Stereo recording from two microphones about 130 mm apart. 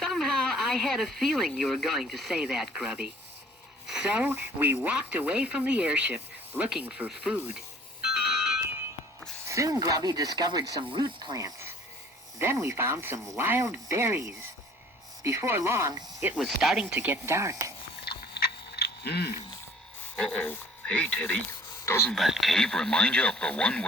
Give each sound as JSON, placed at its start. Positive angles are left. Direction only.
{"t": 0.0, "sound": "speech", "side_deg": 0}
{"t": 8.0, "sound": "music", "side_deg": -5}
{"t": 9.5, "sound": "speech", "side_deg": -25}
{"t": 16.4, "sound": "speech", "side_deg": -5}
{"t": 20.1, "sound": "speech", "side_deg": 10}
{"t": 22.1, "sound": "speech", "side_deg": 0}